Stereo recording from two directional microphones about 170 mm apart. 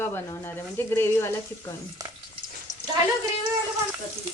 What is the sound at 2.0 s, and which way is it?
Stir, 20° right (ahead or behind).